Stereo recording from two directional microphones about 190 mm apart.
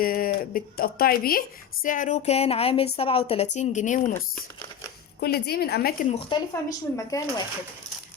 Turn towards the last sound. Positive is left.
turn(degrees=15)  # may be behind; listen again after turning